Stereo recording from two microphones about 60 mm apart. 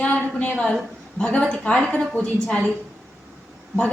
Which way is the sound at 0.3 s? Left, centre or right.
Left.